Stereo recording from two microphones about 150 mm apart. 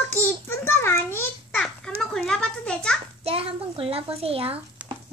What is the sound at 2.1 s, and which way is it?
Speech, 5° left (ahead or behind).